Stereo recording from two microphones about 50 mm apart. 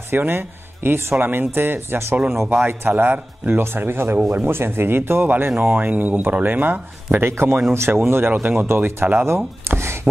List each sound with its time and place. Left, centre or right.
0.1 s speech: right
5.6 s speech: right
7.2 s speech: right
8.5 s speech: right
9.7 s chopping: right